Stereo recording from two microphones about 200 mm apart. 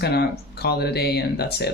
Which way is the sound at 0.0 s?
55° left (ahead or behind).